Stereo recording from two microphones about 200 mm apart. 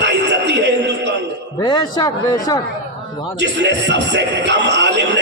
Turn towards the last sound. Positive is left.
turn(degrees=-60)  # may be behind; listen again after turning